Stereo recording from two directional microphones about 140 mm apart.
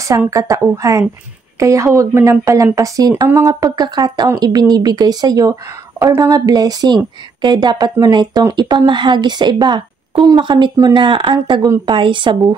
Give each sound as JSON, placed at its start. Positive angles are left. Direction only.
{"t": 0.3, "sound": "a woman's voice", "side_deg": -25}